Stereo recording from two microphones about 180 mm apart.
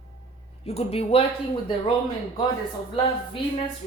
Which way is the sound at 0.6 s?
35° left (ahead or behind).